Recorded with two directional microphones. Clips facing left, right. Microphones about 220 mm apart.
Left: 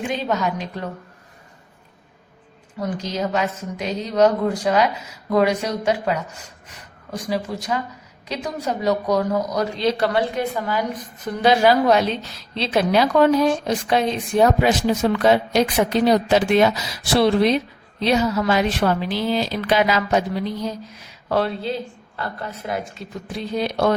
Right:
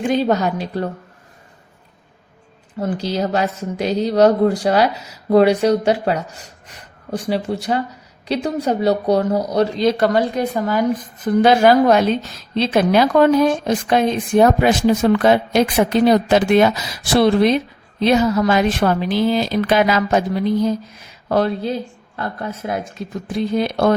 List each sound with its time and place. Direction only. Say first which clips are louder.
0.1 s a woman's voice: right 7 dB; 35° right (ahead or behind)
2.7 s a woman's voice: right 4 dB; 30° right (ahead or behind)
9.8 s a woman's voice: right 2 dB; 45° right (ahead or behind)